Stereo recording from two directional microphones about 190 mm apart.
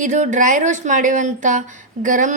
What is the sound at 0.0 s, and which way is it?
Speech, 40° right (ahead or behind).